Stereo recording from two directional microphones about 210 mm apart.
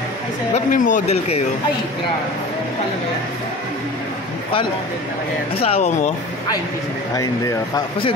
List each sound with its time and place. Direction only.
0.7 s speech: 40° left (ahead or behind)
5.6 s speech: 30° left (ahead or behind)
7.2 s speech: 15° left (ahead or behind)